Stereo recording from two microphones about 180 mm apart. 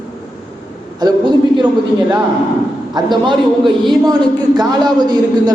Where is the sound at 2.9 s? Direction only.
25° right (ahead or behind).